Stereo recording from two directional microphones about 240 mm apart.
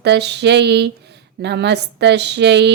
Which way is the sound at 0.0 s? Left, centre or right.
Right.